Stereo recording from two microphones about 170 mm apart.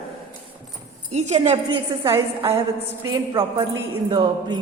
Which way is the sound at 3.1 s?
15° right (ahead or behind).